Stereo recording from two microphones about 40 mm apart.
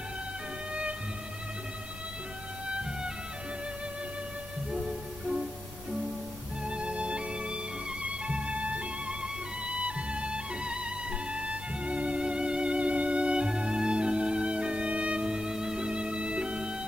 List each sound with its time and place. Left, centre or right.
2.7 s music: right
4.7 s music: centre
6.6 s music: right